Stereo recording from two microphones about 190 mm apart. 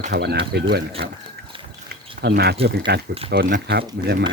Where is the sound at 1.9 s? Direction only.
60° right (ahead or behind).